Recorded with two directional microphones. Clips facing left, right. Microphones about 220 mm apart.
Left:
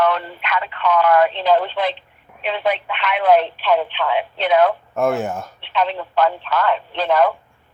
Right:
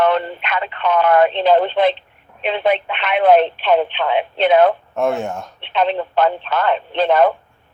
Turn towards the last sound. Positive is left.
turn(degrees=-25)  # may be behind; listen again after turning